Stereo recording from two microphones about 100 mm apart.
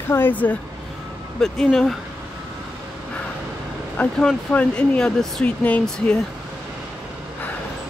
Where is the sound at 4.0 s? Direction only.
15° left (ahead or behind).